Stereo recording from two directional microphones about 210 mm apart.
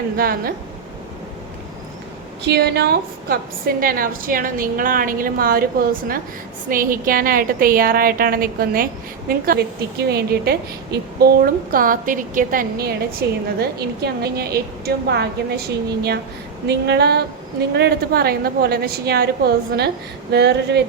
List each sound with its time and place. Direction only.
0.2 s a woman's voice: 45° right (ahead or behind)
2.5 s a woman's voice: 50° right (ahead or behind)
20.3 s a woman's voice: 55° right (ahead or behind)